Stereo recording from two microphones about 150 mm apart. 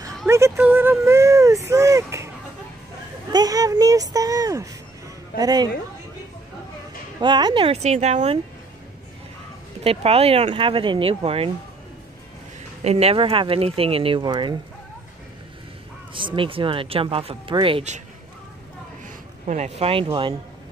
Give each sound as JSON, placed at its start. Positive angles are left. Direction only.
{"t": 0.3, "sound": "speech", "side_deg": -15}
{"t": 1.0, "sound": "baby cry", "side_deg": -20}
{"t": 3.3, "sound": "a woman's voice", "side_deg": -25}
{"t": 7.2, "sound": "speech", "side_deg": -30}
{"t": 9.8, "sound": "speech", "side_deg": -40}
{"t": 12.8, "sound": "speech", "side_deg": -40}
{"t": 16.1, "sound": "speech", "side_deg": -35}
{"t": 19.4, "sound": "speech", "side_deg": -50}